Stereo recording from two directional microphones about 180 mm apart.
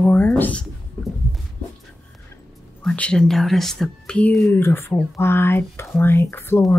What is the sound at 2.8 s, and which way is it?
Speech, 5° left (ahead or behind).